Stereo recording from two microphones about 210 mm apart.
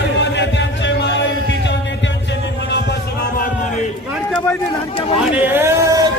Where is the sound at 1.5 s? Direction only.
55° left (ahead or behind).